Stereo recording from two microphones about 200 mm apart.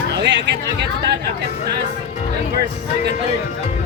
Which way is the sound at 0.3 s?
60° right (ahead or behind).